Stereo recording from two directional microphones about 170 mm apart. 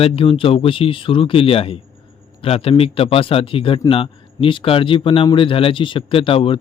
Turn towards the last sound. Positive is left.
turn(degrees=30)  # may be behind; listen again after turning